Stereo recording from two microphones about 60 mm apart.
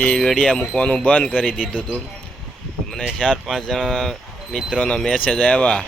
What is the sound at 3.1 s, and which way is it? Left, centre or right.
Speech, centre.